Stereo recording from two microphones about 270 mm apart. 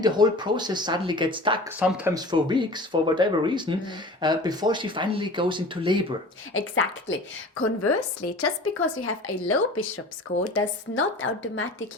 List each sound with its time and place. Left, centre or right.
0.0 s speech: centre
6.5 s speech: left